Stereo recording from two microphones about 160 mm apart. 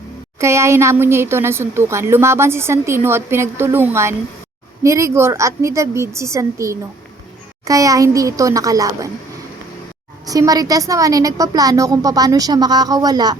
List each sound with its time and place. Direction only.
0.3 s a woman's voice: 15° right (ahead or behind)
10.2 s a woman's voice: 20° right (ahead or behind)